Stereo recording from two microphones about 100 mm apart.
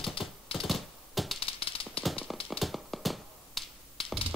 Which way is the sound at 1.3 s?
65° left (ahead or behind).